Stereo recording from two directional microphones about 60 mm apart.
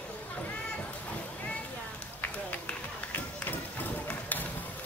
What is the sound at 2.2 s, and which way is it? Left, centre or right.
Run, left.